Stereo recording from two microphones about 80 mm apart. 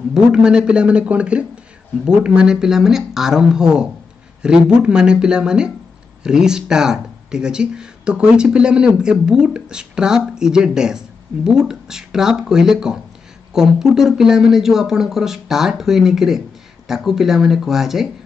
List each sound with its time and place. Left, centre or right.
0.1 s speech: centre